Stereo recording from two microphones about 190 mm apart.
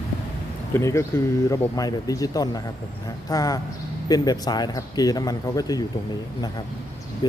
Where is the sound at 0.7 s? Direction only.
15° left (ahead or behind).